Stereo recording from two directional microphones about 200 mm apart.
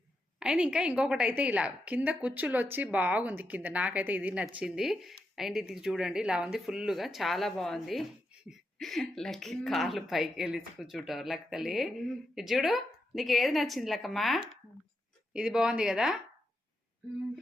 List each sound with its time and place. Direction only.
0.3 s a woman's voice: 5° right (ahead or behind)